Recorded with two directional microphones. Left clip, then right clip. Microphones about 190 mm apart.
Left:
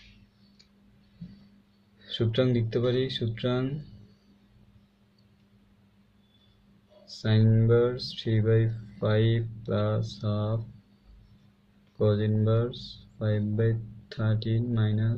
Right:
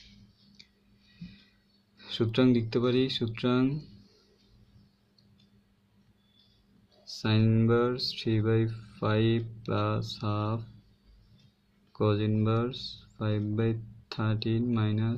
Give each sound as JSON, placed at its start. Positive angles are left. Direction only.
{"t": 2.0, "sound": "speech", "side_deg": -45}
{"t": 7.1, "sound": "speech", "side_deg": -45}
{"t": 12.0, "sound": "speech", "side_deg": -50}